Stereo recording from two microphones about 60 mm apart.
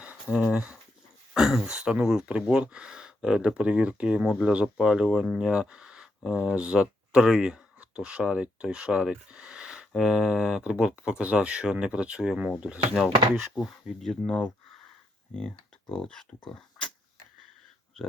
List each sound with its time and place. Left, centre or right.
0.0 s a sound: centre
1.3 s speech: centre
12.9 s speech: centre
14.3 s speech: left